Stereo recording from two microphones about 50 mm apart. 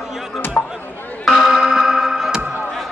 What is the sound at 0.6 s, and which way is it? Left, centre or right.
Chatter, left.